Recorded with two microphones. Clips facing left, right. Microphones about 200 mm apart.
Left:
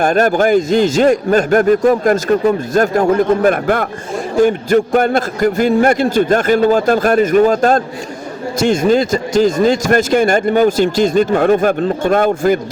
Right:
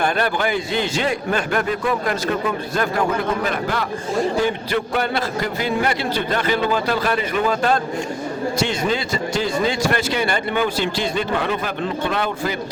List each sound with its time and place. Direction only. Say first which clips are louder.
0.0 s a man's voice: left 8 dB; 45° left (ahead or behind)